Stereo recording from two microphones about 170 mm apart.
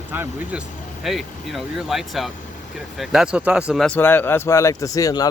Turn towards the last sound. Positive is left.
turn(degrees=20)  # may be behind; listen again after turning